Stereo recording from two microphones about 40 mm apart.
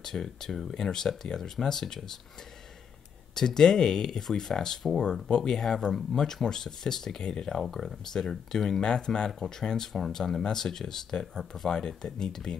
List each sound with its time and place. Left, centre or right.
0.0 s speech: centre
3.3 s speech: centre
7.6 s speech: centre